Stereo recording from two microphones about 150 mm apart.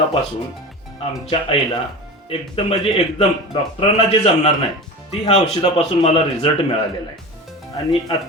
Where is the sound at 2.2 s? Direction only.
40° left (ahead or behind).